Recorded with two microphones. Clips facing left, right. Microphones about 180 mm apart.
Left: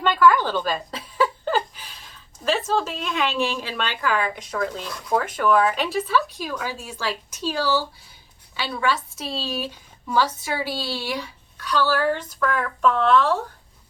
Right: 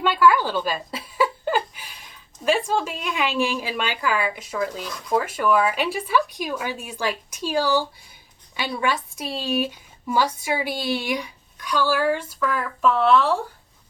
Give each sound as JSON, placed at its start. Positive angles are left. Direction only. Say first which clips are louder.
{"t": 0.0, "sound": "a woman's voice", "louder": "even", "side_deg": -10}